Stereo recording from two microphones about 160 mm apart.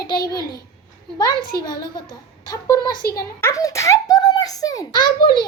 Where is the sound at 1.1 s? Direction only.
25° left (ahead or behind).